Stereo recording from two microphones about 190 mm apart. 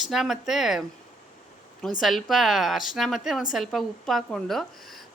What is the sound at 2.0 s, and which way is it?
Speech, centre (ahead or behind).